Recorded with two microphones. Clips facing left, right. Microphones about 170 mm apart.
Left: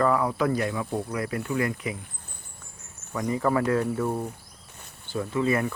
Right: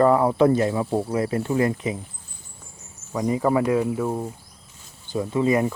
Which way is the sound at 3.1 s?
15° right (ahead or behind).